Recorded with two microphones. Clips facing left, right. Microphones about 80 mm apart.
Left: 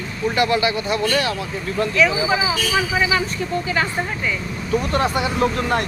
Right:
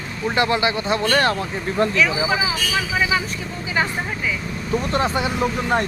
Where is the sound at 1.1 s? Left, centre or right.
Right.